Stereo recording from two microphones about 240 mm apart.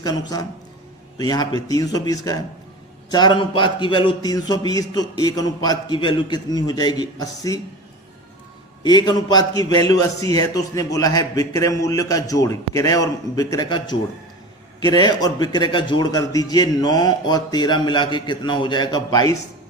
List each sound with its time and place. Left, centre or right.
1.2 s a man's voice: centre
8.8 s a man's voice: centre